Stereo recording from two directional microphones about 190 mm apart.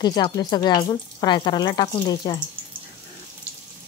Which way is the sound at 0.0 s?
20° left (ahead or behind).